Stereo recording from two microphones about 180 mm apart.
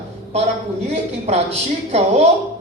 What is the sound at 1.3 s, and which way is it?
Speech, 35° right (ahead or behind).